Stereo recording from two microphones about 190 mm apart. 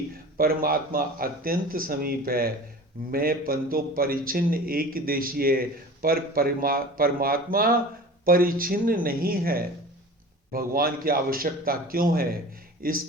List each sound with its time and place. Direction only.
0.3 s a man's voice: 50° right (ahead or behind)